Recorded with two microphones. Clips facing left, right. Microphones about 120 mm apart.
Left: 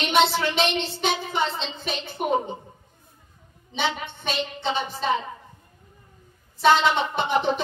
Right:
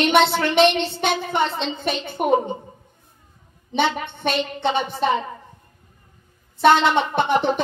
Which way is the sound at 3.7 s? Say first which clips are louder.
Right 6 dB; 60° right (ahead or behind).